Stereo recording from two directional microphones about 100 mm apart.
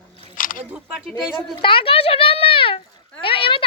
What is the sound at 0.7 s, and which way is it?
Speech, 10° right (ahead or behind).